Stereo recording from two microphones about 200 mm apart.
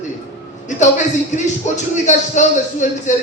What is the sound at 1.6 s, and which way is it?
A man's voice, 35° left (ahead or behind).